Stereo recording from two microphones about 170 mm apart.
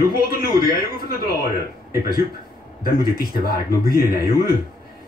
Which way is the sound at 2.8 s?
60° left (ahead or behind).